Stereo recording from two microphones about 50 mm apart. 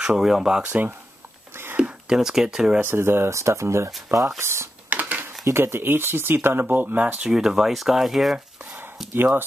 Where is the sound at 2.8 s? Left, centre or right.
Right.